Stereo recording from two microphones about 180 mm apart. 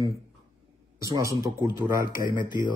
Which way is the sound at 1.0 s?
15° right (ahead or behind).